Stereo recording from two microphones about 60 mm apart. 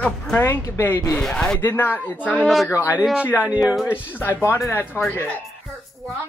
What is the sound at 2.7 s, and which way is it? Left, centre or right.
Speech, left.